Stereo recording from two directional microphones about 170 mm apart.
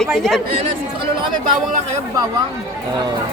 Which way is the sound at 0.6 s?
30° right (ahead or behind).